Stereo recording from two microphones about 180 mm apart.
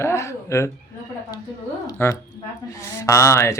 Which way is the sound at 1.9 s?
15° left (ahead or behind).